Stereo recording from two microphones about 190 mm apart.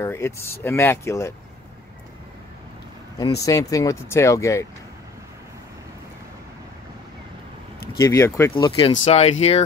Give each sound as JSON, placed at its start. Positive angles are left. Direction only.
{"t": 0.0, "sound": "speech", "side_deg": 15}
{"t": 3.2, "sound": "speech", "side_deg": 20}
{"t": 8.0, "sound": "speech", "side_deg": 15}